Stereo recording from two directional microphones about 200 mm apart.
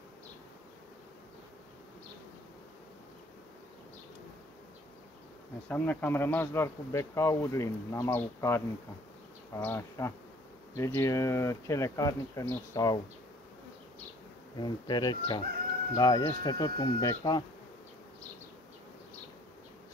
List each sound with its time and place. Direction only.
5.7 s speech: 10° left (ahead or behind)
14.6 s speech: 20° left (ahead or behind)